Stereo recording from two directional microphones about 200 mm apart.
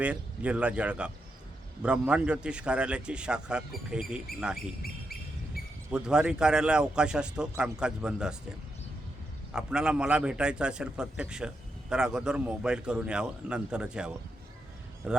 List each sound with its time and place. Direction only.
0.0 s a man's voice: 5° right (ahead or behind)
4.5 s speech: 50° left (ahead or behind)
5.9 s a man's voice: 5° right (ahead or behind)
9.5 s a man's voice: 5° right (ahead or behind)